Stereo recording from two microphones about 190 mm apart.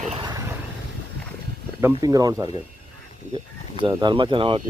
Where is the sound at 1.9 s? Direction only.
20° right (ahead or behind).